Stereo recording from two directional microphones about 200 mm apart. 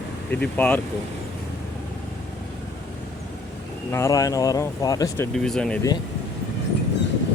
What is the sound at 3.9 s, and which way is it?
Speech, 15° left (ahead or behind).